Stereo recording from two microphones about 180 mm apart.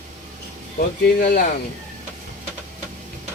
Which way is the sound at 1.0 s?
55° left (ahead or behind).